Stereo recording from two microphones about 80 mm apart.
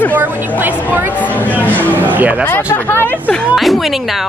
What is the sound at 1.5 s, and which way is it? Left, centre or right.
Speech, right.